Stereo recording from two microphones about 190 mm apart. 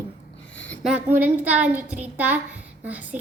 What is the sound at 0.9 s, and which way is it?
A child's voice, 10° right (ahead or behind).